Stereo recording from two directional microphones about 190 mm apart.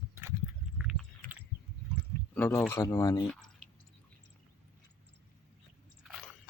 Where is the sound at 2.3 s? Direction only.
10° left (ahead or behind).